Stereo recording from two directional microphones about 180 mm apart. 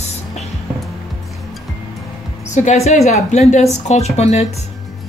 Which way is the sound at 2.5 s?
40° left (ahead or behind).